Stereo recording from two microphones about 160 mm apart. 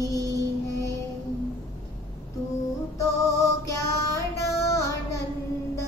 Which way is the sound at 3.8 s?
20° left (ahead or behind).